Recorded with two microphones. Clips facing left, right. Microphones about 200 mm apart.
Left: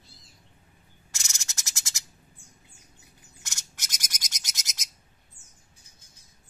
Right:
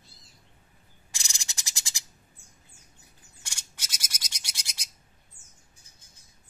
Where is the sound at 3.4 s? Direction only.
10° right (ahead or behind).